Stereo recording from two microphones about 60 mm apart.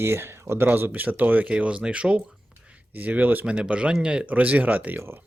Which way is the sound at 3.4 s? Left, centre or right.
Centre.